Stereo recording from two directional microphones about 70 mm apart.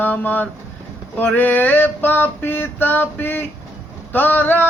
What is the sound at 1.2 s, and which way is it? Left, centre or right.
Male singing, left.